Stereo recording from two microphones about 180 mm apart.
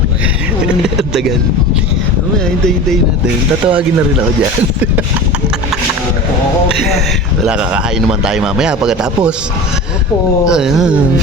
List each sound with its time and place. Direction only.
0.9 s a man's voice: centre (ahead or behind)
3.7 s speech: 5° right (ahead or behind)
7.4 s a man's voice: 5° right (ahead or behind)
10.4 s a man's voice: 5° right (ahead or behind)